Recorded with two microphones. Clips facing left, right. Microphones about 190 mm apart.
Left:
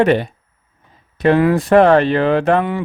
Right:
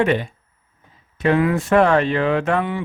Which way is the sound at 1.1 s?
35° left (ahead or behind).